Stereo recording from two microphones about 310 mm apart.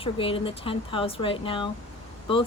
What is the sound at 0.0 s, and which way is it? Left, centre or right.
Speech, centre.